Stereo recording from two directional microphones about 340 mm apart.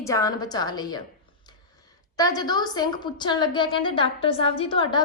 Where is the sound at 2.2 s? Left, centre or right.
Centre.